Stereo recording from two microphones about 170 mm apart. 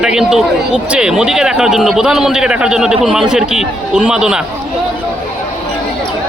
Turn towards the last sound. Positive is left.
turn(degrees=-5)  # may be behind; listen again after turning